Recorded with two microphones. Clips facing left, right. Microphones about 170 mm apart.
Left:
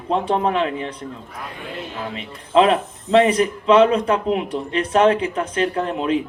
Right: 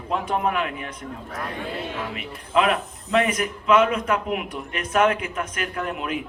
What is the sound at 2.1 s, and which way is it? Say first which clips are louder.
Speech: left 8 dB; 30° left (ahead or behind).